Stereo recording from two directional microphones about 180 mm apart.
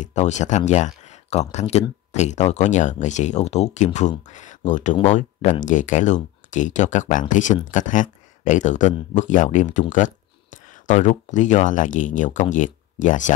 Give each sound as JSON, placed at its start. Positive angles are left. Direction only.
{"t": 0.0, "sound": "speech", "side_deg": 40}